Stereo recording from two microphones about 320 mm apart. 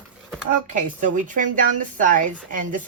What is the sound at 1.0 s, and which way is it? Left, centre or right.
Speech, right.